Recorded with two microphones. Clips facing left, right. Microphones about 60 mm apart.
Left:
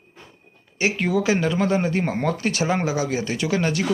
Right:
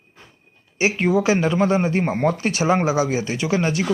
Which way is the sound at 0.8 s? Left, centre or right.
Centre.